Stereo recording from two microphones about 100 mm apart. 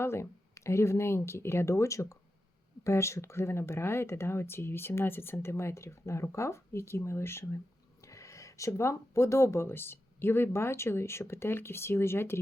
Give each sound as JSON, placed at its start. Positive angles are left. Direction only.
{"t": 0.0, "sound": "speech", "side_deg": 25}